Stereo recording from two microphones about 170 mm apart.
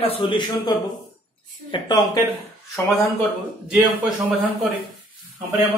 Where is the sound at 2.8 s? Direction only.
Centre (ahead or behind).